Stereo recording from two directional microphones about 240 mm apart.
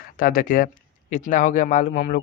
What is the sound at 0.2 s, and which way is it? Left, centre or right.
Speech, left.